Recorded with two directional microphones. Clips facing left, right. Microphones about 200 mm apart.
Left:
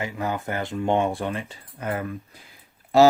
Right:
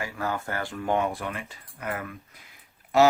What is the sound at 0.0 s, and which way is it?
Speech, 20° left (ahead or behind).